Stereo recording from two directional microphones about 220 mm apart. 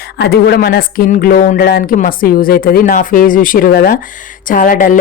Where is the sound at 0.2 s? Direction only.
45° left (ahead or behind).